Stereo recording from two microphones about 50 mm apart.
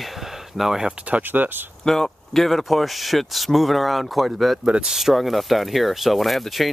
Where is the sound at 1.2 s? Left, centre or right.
Right.